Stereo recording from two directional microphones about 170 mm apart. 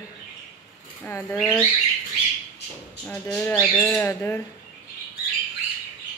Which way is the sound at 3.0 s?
5° left (ahead or behind).